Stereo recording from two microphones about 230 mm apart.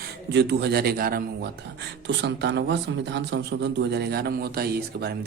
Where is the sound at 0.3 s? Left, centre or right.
Right.